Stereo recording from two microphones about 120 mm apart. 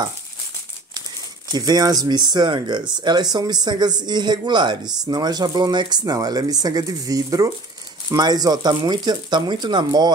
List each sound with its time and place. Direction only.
1.5 s speech: 35° right (ahead or behind)